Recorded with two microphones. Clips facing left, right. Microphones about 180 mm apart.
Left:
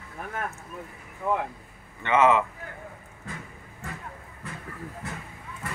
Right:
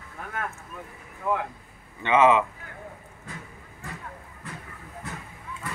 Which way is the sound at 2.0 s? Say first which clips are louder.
Right 1 dB; 30° right (ahead or behind).